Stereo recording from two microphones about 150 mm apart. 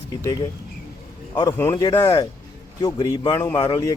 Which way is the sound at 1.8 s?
25° left (ahead or behind).